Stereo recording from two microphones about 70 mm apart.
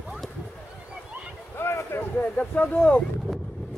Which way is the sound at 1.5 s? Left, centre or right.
Left.